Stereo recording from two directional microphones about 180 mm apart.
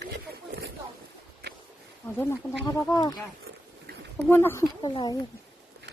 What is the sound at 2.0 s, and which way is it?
Speech, 10° left (ahead or behind).